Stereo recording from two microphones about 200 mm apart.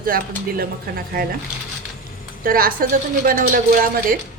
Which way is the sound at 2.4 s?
45° right (ahead or behind).